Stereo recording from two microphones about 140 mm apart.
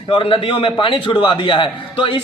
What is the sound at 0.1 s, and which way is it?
A man's voice, 40° left (ahead or behind).